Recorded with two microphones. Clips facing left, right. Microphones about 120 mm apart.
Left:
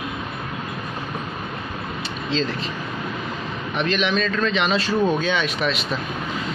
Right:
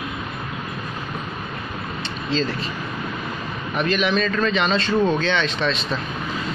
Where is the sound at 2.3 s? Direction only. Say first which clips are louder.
Right 1 dB; centre (ahead or behind).